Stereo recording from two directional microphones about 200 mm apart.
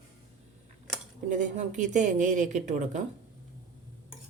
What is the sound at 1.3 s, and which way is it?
A woman's voice, 40° right (ahead or behind).